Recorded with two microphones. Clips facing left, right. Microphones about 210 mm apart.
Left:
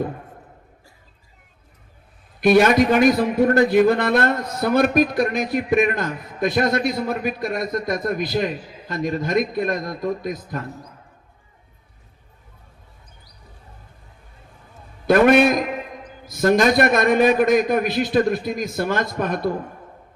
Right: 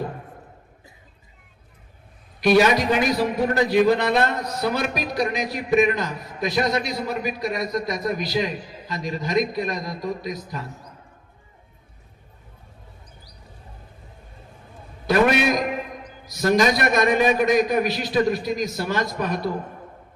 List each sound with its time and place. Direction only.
2.6 s a man's voice: 55° left (ahead or behind)
15.0 s a sound: 50° left (ahead or behind)
16.2 s a man's voice: 50° left (ahead or behind)